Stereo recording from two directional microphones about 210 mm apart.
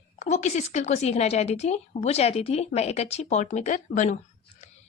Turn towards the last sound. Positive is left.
turn(degrees=35)  # may be behind; listen again after turning